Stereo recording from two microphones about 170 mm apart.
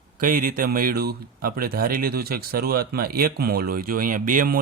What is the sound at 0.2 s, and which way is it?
Speech, 55° right (ahead or behind).